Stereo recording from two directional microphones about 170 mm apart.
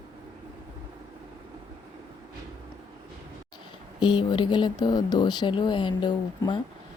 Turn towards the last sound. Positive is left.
turn(degrees=25)  # may be behind; listen again after turning